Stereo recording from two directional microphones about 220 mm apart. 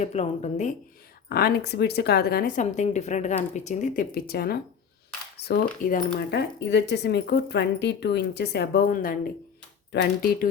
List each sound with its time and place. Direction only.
0.0 s speech: 30° left (ahead or behind)
1.3 s speech: 45° left (ahead or behind)